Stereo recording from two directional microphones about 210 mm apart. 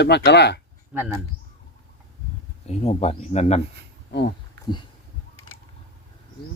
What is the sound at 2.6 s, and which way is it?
Speech, 30° left (ahead or behind).